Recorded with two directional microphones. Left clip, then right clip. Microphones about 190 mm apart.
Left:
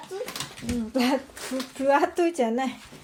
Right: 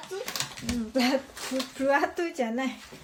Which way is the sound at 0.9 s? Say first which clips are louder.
Left 1 dB; 20° left (ahead or behind).